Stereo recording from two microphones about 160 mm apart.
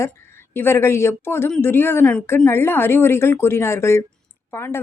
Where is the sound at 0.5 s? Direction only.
15° left (ahead or behind).